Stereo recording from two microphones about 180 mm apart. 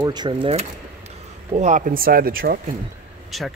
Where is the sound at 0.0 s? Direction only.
25° right (ahead or behind); by 2.6 s 55° right (ahead or behind).